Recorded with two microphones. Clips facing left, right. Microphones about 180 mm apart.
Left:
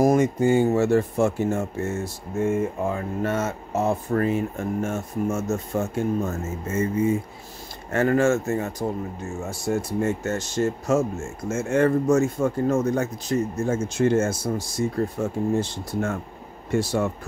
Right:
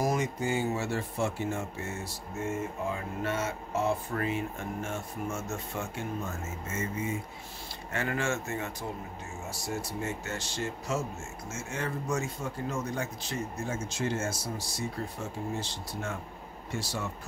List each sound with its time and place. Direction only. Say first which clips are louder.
0.0 s speech: left 11 dB; 50° left (ahead or behind)